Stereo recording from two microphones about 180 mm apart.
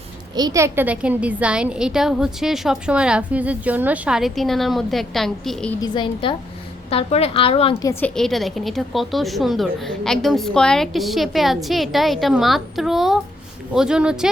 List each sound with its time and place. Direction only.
0.3 s a woman's voice: 20° right (ahead or behind); by 5.7 s centre (ahead or behind)
5.8 s a woman's voice: 25° left (ahead or behind)
7.8 s a woman's voice: 15° left (ahead or behind); by 14.3 s 5° right (ahead or behind)